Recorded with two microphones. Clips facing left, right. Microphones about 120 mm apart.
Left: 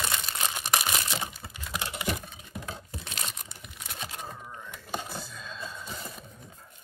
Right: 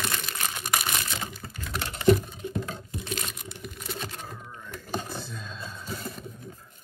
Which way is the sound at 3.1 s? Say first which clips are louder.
Right 5 dB; 25° left (ahead or behind).